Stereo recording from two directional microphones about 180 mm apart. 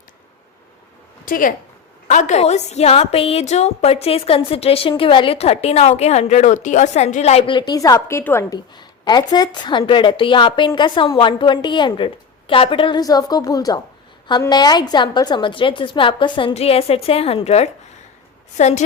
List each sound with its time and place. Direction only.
1.2 s a woman's voice: 50° left (ahead or behind)